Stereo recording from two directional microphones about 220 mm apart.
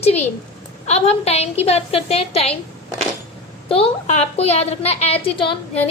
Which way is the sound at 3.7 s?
25° left (ahead or behind).